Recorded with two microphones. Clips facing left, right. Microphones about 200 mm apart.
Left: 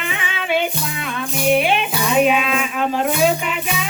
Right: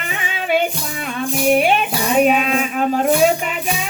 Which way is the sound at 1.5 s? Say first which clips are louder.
Even; 45° right (ahead or behind).